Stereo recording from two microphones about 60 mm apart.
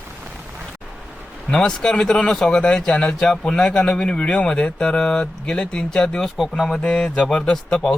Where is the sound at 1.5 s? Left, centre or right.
Centre.